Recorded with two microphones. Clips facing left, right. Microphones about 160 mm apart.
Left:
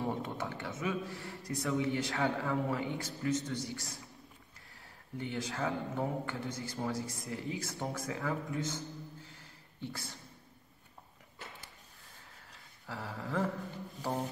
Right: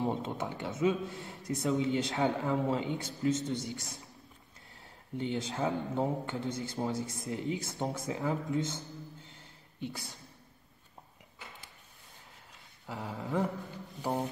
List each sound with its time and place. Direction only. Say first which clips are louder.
0.0 s speech: right 3 dB; 20° right (ahead or behind)
5.1 s speech: right 4 dB; 25° right (ahead or behind)
12.8 s a sound: right 2 dB; 20° right (ahead or behind)